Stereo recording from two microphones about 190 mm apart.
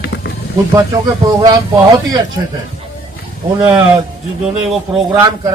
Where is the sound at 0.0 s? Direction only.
65° left (ahead or behind).